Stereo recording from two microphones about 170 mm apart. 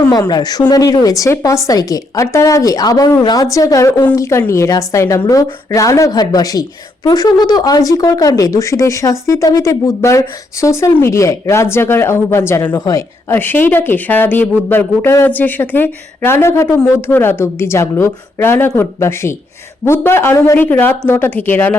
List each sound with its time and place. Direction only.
0.1 s a woman's voice: 25° left (ahead or behind)